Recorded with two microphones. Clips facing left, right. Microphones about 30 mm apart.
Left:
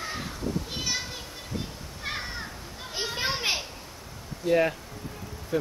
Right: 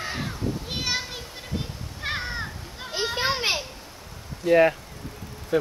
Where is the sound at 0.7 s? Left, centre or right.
Right.